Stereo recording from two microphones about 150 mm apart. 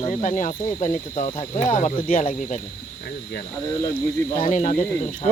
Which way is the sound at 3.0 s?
80° left.